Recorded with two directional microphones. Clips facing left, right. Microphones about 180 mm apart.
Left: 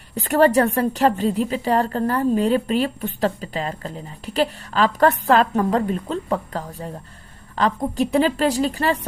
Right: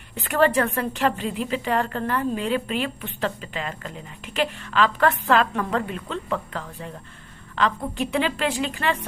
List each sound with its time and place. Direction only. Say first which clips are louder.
0.1 s a woman's voice: left 4 dB; 40° left (ahead or behind)